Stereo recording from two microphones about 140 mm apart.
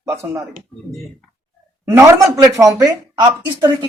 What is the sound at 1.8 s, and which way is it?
A man's voice, 20° right (ahead or behind).